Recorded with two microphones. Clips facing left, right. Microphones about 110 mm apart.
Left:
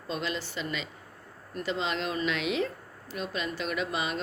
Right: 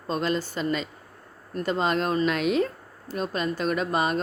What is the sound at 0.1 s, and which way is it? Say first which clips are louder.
Speech: right 7 dB; 45° right (ahead or behind).